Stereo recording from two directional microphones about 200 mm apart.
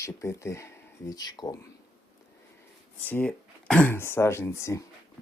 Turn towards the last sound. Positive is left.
turn(degrees=15)  # may be behind; listen again after turning